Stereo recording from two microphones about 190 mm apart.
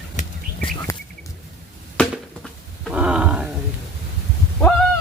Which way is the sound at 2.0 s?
Centre (ahead or behind).